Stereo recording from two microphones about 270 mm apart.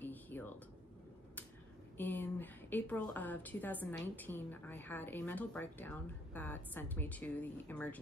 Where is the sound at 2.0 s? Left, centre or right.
Centre.